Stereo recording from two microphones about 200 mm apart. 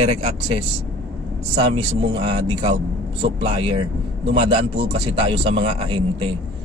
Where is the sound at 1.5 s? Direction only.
25° right (ahead or behind).